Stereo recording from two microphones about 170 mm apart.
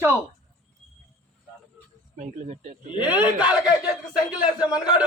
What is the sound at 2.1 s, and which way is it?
Speech, 45° right (ahead or behind).